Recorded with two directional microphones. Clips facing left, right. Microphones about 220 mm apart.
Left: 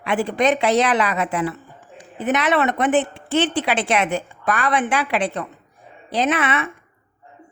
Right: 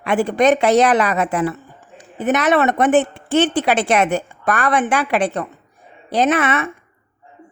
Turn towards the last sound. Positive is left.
turn(degrees=-45)  # may be behind; listen again after turning